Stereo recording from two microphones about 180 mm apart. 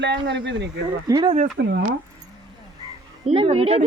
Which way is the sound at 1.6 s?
70° right (ahead or behind).